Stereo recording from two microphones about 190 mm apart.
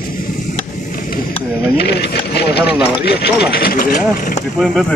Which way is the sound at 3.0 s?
60° left (ahead or behind).